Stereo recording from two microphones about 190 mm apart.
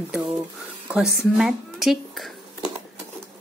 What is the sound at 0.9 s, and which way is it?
Speech, 5° right (ahead or behind).